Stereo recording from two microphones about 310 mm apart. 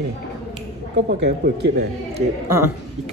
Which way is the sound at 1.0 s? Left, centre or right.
Right.